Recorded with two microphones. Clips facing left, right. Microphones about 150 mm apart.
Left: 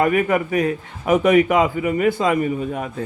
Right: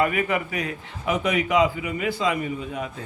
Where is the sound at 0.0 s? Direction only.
45° left (ahead or behind).